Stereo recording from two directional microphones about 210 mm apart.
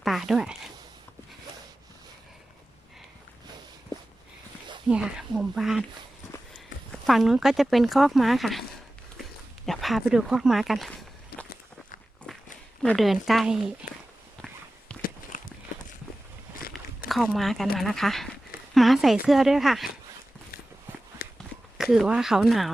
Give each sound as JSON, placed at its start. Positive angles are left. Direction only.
{"t": 0.0, "sound": "speech", "side_deg": 0}
{"t": 4.9, "sound": "speech", "side_deg": -5}
{"t": 7.1, "sound": "speech", "side_deg": 0}
{"t": 9.6, "sound": "speech", "side_deg": 0}
{"t": 11.3, "sound": "walk", "side_deg": 50}
{"t": 12.3, "sound": "walk", "side_deg": 5}
{"t": 12.8, "sound": "speech", "side_deg": 0}
{"t": 15.3, "sound": "run", "side_deg": 40}
{"t": 16.7, "sound": "a sound", "side_deg": 0}
{"t": 17.1, "sound": "speech", "side_deg": 0}
{"t": 21.2, "sound": "a sound", "side_deg": 45}
{"t": 21.8, "sound": "speech", "side_deg": -5}